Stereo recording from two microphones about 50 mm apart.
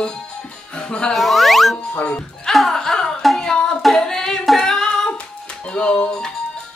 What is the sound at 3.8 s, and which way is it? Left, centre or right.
Singing, centre.